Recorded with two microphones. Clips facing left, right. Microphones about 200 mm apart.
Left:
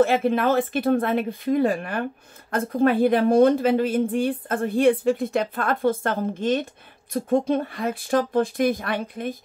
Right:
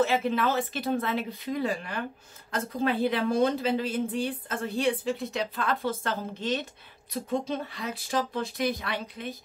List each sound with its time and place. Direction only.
0.0 s speech: 50° left (ahead or behind)